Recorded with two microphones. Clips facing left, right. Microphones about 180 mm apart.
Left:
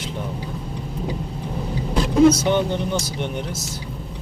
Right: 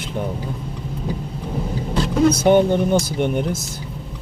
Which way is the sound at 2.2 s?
55° right (ahead or behind).